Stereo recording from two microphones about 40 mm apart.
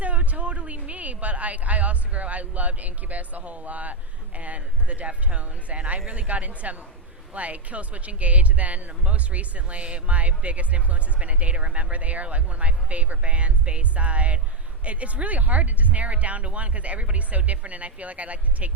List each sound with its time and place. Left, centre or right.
0.0 s speech: right